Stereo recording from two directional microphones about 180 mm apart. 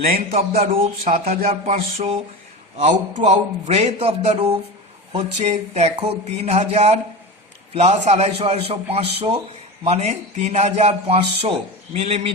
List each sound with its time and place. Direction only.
0.0 s speech: 55° right (ahead or behind)
0.6 s a man's voice: 40° right (ahead or behind)
3.2 s a man's voice: 35° right (ahead or behind)